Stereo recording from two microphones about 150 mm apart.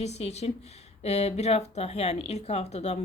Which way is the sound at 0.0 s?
45° left (ahead or behind).